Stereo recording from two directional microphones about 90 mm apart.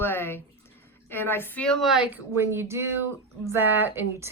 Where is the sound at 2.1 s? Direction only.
30° right (ahead or behind).